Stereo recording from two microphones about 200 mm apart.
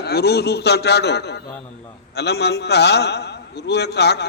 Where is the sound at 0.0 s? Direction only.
55° left (ahead or behind).